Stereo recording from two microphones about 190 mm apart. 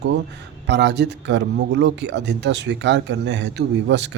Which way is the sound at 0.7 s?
65° right (ahead or behind).